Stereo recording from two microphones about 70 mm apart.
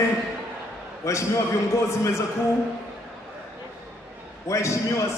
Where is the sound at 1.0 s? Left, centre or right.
Left.